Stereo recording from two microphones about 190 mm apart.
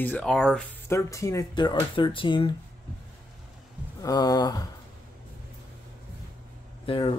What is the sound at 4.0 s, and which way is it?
Speech, 20° left (ahead or behind).